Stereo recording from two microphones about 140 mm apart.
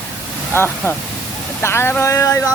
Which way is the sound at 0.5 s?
15° left (ahead or behind).